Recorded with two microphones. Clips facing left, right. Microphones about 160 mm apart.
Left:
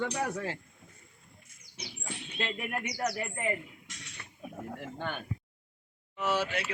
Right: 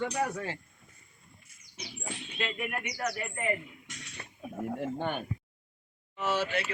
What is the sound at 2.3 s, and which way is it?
Speech, 35° left (ahead or behind).